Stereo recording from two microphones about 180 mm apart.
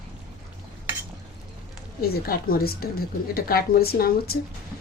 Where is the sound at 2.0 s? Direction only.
55° left (ahead or behind).